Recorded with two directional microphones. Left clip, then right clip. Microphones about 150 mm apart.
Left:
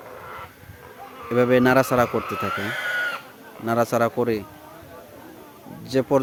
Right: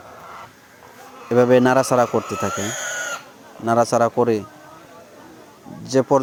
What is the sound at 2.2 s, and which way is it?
Speech, 50° right (ahead or behind).